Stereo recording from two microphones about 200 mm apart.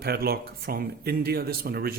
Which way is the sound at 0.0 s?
50° right (ahead or behind).